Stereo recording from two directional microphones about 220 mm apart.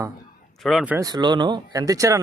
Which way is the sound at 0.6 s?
Centre (ahead or behind).